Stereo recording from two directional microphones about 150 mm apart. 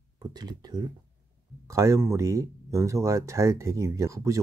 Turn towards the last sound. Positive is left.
turn(degrees=-20)  # may be behind; listen again after turning